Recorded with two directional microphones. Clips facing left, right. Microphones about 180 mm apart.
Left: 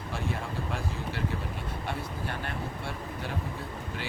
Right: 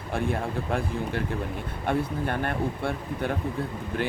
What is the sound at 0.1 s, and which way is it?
Speech, 55° right (ahead or behind).